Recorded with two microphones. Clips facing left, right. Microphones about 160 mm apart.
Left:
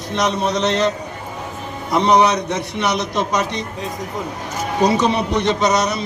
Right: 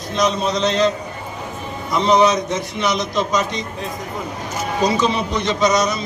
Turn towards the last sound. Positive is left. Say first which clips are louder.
# even
turn(degrees=65)  # may be behind; listen again after turning